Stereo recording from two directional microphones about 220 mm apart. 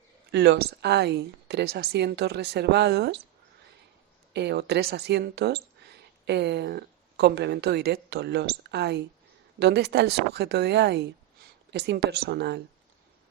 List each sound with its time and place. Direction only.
0.3 s speech: 50° right (ahead or behind)
4.4 s speech: 50° right (ahead or behind)